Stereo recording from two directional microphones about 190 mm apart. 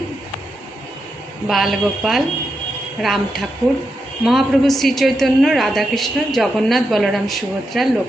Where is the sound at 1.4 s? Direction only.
Centre (ahead or behind).